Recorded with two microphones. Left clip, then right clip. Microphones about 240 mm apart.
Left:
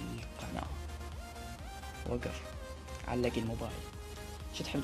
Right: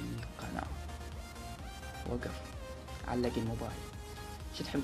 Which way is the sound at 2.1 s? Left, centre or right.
Centre.